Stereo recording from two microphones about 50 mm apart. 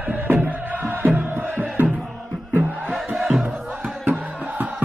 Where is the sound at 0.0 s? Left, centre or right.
Right.